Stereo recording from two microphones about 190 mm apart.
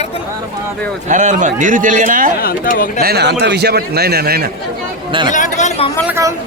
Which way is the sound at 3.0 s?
55° right (ahead or behind).